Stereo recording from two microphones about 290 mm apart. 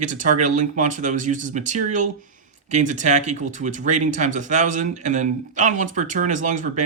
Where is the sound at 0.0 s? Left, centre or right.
Right.